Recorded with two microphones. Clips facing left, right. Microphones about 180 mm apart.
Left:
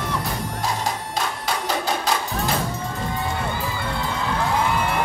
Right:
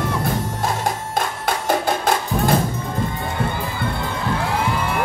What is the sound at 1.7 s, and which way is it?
Music, 50° right (ahead or behind).